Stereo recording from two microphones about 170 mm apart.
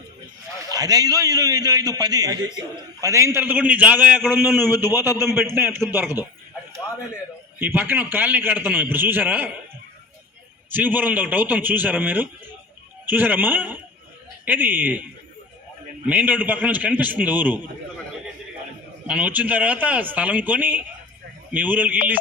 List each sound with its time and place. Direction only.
0.7 s a man's voice: 20° right (ahead or behind)
7.6 s a man's voice: 15° right (ahead or behind)
10.7 s a man's voice: 10° right (ahead or behind)
16.0 s a man's voice: 10° right (ahead or behind)
19.0 s a man's voice: 10° right (ahead or behind)